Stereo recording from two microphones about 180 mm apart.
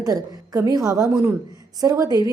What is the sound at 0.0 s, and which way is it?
A woman's voice, 20° right (ahead or behind).